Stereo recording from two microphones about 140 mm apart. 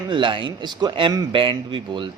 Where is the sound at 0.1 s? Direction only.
35° right (ahead or behind).